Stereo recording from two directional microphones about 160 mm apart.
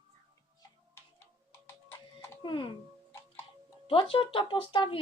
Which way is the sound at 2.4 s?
30° left (ahead or behind).